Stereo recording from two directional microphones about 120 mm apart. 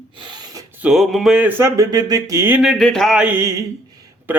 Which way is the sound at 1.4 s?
25° right (ahead or behind).